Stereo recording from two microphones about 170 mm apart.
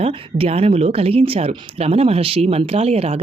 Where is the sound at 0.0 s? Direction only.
35° right (ahead or behind).